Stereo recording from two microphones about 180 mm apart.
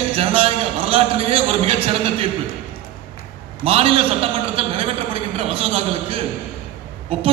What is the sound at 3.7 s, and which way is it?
A man's voice, 30° right (ahead or behind).